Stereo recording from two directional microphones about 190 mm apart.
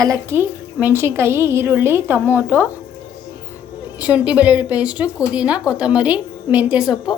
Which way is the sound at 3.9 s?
5° right (ahead or behind).